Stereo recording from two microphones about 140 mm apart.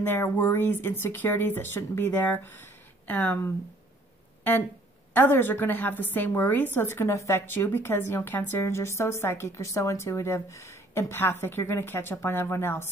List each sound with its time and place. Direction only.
0.0 s a woman's voice: 15° left (ahead or behind)
5.1 s a woman's voice: 15° left (ahead or behind)